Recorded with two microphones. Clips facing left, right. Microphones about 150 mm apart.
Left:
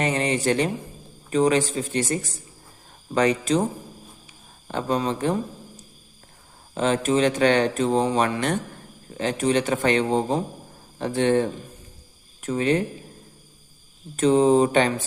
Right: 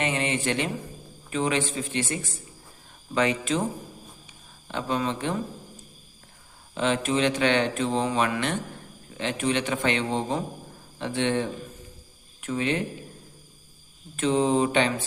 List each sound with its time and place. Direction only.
0.0 s a man's voice: 40° left (ahead or behind)
4.7 s a man's voice: 40° left (ahead or behind)
14.2 s speech: 40° left (ahead or behind)